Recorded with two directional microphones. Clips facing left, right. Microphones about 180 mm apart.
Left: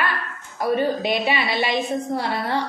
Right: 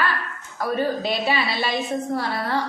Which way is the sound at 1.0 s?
15° left (ahead or behind).